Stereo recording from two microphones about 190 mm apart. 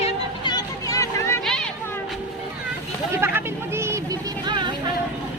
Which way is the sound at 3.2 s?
15° right (ahead or behind).